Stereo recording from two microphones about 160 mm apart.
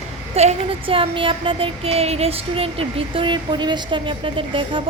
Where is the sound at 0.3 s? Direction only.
40° right (ahead or behind).